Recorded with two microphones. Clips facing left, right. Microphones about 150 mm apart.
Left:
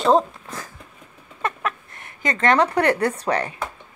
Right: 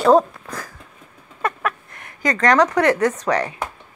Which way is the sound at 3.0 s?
35° left (ahead or behind).